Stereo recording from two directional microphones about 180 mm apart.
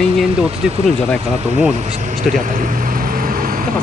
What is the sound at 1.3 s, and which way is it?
Speech, 40° right (ahead or behind).